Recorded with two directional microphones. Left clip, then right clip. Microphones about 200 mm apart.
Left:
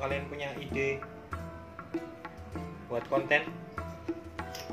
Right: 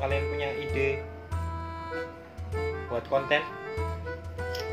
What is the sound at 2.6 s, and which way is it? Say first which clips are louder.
Speech: right 5 dB; 5° right (ahead or behind).